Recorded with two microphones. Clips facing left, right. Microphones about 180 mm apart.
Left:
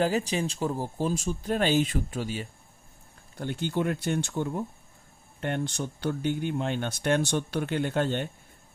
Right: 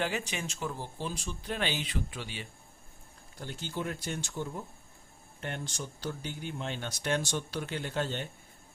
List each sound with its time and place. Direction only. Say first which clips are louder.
0.0 s speech: left 8 dB; 35° left (ahead or behind)
3.3 s speech: left 9 dB; 60° left (ahead or behind)